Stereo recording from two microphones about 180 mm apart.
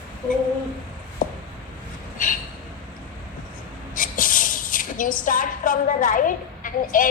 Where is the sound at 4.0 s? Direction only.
50° left (ahead or behind).